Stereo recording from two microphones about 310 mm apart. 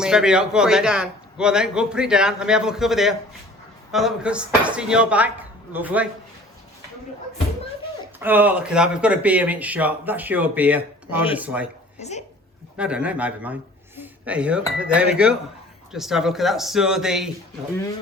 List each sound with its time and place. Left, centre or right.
0.0 s speech: centre
8.2 s speech: centre
11.9 s speech: left
12.7 s a man's voice: centre